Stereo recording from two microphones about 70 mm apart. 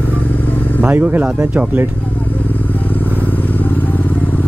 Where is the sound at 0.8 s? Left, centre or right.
Right.